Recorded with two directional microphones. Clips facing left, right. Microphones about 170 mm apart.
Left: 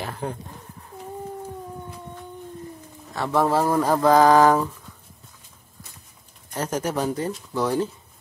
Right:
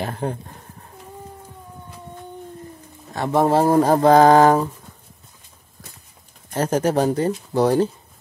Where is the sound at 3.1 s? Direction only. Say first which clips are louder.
Right 3 dB; 20° right (ahead or behind).